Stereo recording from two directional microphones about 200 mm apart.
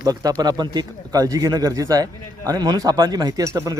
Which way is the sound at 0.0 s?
20° right (ahead or behind).